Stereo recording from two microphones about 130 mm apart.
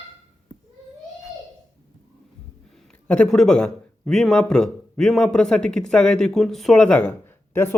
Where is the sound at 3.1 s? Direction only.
5° left (ahead or behind).